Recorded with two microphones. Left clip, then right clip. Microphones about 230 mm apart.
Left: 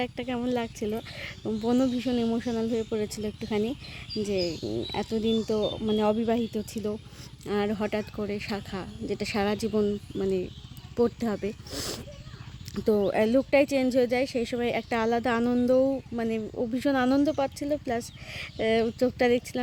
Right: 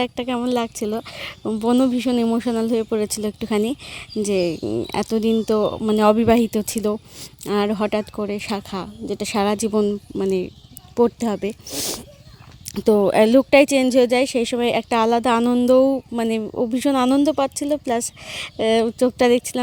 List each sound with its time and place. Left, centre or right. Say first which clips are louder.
0.0 s speech: right 8 dB; right